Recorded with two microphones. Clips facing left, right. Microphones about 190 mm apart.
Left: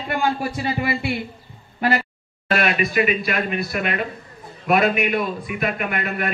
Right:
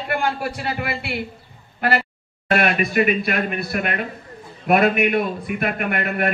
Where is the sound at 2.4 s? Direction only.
50° right (ahead or behind).